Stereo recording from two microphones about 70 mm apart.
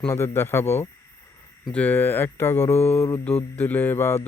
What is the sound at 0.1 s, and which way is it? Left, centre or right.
Speech, left.